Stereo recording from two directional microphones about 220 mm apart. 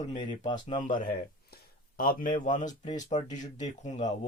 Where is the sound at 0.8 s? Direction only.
40° left (ahead or behind).